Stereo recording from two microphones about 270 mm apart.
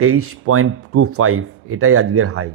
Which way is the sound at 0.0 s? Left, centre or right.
Right.